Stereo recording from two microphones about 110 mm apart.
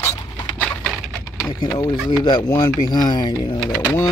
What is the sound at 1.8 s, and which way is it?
Speech, 35° left (ahead or behind).